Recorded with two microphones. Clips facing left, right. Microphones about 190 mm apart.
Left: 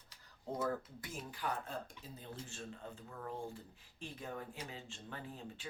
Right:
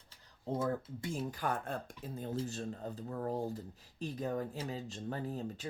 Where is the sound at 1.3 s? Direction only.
45° right (ahead or behind).